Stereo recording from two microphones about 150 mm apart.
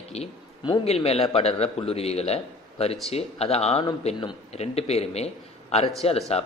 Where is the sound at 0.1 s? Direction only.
45° left (ahead or behind).